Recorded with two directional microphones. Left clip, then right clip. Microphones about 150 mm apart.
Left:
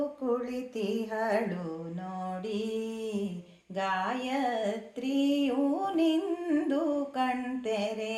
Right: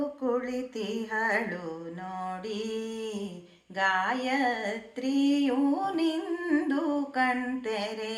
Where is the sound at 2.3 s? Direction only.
40° left (ahead or behind).